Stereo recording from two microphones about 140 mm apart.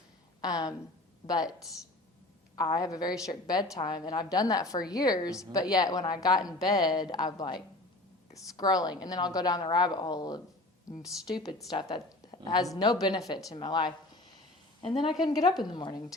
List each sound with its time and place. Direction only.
0.4 s a sound: 25° left (ahead or behind)
1.3 s a woman's voice: 25° left (ahead or behind)
2.6 s a woman's voice: 30° left (ahead or behind)
15.2 s a woman's voice: 30° left (ahead or behind)